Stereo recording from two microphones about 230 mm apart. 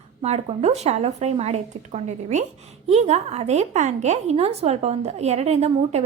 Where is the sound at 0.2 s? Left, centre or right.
Right.